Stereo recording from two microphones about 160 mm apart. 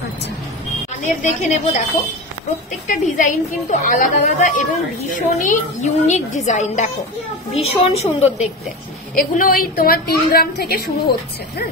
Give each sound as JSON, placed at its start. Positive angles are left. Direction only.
{"t": 1.0, "sound": "a woman's voice", "side_deg": 50}
{"t": 2.9, "sound": "a woman's voice", "side_deg": 60}
{"t": 9.1, "sound": "a woman's voice", "side_deg": 65}